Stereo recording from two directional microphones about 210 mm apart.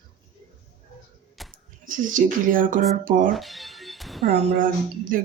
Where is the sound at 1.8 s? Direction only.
40° right (ahead or behind).